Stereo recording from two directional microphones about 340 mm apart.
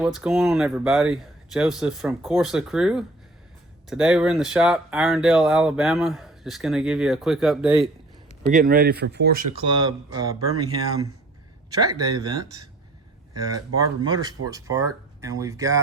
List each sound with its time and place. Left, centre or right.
0.0 s speech: centre
8.4 s speech: right
9.6 s speech: centre